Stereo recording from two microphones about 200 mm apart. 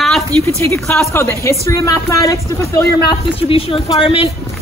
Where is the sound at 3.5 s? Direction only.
25° left (ahead or behind).